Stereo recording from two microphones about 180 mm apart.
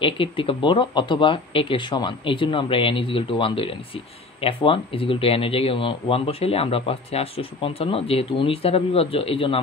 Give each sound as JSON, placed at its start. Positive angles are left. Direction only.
{"t": 0.0, "sound": "speech", "side_deg": 30}